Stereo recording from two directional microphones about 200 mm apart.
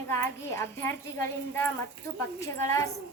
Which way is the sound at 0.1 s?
10° left (ahead or behind).